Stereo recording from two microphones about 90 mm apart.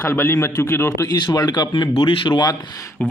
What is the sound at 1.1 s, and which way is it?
Speech, 50° left (ahead or behind).